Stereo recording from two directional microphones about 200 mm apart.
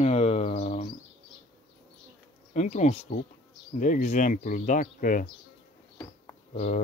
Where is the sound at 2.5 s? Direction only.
35° left (ahead or behind).